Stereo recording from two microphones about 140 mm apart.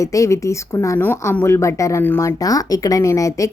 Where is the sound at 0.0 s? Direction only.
25° left (ahead or behind).